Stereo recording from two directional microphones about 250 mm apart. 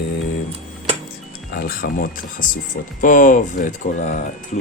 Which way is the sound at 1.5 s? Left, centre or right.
Left.